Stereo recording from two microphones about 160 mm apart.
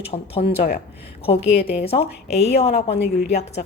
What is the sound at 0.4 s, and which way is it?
Speech, 80° left.